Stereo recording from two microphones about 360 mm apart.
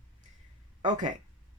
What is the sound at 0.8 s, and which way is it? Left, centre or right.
Speech, centre.